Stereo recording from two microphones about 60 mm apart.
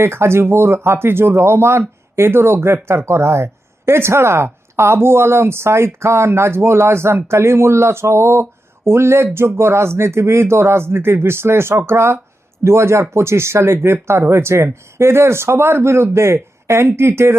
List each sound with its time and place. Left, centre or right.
0.0 s speech: right